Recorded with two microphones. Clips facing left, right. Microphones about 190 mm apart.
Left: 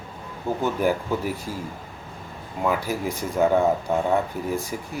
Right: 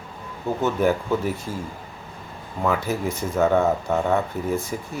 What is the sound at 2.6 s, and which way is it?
Speech, 10° left (ahead or behind).